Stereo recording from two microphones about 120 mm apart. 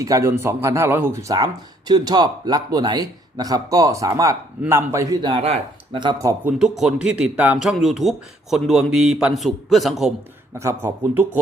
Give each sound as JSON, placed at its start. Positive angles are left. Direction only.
{"t": 0.0, "sound": "speech", "side_deg": -25}
{"t": 5.2, "sound": "speech", "side_deg": -55}
{"t": 6.4, "sound": "speech", "side_deg": -5}
{"t": 10.6, "sound": "speech", "side_deg": -20}